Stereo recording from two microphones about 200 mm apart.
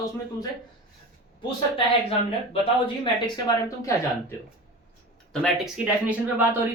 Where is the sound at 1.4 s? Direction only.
25° left (ahead or behind).